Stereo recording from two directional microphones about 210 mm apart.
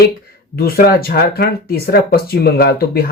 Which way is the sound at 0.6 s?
45° left (ahead or behind).